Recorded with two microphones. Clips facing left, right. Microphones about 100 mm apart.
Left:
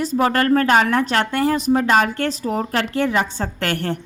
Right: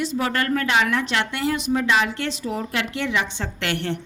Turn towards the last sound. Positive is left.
turn(degrees=40)  # may be behind; listen again after turning